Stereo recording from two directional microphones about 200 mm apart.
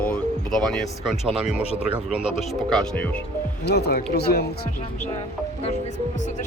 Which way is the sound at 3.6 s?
55° left (ahead or behind).